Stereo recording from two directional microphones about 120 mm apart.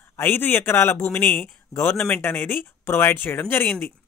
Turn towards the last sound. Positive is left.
turn(degrees=15)  # may be behind; listen again after turning